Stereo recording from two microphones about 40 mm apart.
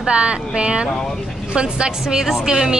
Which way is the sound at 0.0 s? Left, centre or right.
Right.